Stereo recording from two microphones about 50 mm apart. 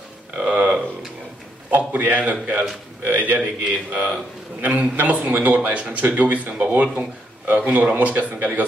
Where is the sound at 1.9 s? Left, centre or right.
Right.